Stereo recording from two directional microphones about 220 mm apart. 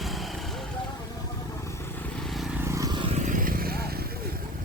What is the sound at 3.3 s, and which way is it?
Vehicle, 40° right (ahead or behind).